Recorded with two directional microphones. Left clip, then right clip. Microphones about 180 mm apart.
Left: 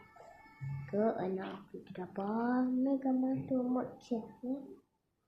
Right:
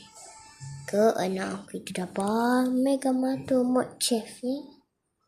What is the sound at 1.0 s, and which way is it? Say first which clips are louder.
Speech: right 10 dB; 35° right (ahead or behind).